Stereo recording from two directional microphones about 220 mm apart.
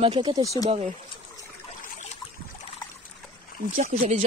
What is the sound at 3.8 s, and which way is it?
Speech, 30° right (ahead or behind).